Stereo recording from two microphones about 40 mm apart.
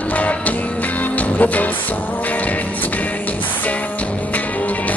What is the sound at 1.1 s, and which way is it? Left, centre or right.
Music, left.